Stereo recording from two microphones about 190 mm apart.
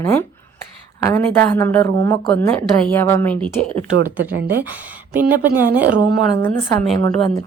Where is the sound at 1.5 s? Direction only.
10° left (ahead or behind).